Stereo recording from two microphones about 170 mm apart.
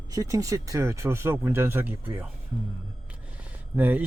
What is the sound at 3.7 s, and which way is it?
Speech, 10° right (ahead or behind).